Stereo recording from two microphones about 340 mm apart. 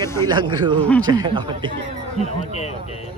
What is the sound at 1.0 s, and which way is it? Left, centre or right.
Speech, centre.